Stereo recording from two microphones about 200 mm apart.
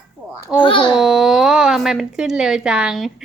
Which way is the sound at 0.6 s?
25° left (ahead or behind).